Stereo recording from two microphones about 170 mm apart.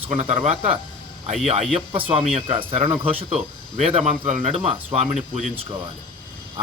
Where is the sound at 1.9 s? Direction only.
30° right (ahead or behind).